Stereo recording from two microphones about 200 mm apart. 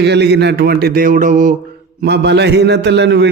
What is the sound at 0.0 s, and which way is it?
A man's voice, 55° right (ahead or behind).